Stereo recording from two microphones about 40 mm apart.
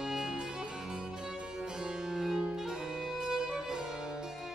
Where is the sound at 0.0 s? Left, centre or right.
Centre.